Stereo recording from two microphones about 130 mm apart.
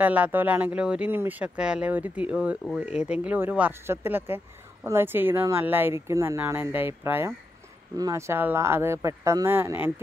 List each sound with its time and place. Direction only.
0.0 s speech: 15° right (ahead or behind)